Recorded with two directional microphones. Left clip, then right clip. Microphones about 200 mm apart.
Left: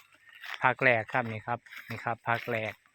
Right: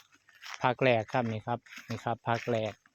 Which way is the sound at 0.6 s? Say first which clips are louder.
Left 2 dB; 55° right (ahead or behind).